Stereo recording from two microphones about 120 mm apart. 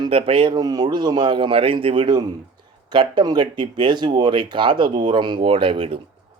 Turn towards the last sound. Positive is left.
turn(degrees=-50)  # may be behind; listen again after turning